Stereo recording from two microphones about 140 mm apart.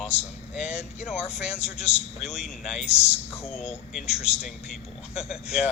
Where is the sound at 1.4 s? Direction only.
50° left (ahead or behind).